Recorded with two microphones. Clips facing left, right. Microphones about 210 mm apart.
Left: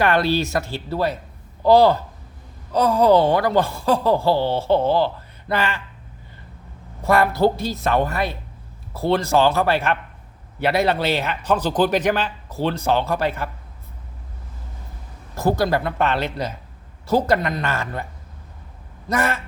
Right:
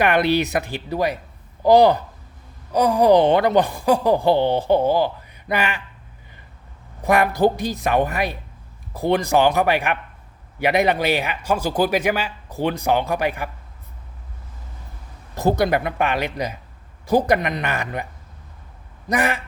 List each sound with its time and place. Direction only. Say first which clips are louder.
0.0 s speech: right 1 dB; 15° right (ahead or behind)
7.0 s speech: even; 15° right (ahead or behind)
15.4 s speech: right 1 dB; 20° right (ahead or behind)